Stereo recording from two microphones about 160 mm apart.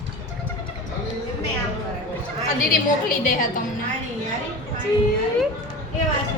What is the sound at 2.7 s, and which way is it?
Speech, 60° left (ahead or behind).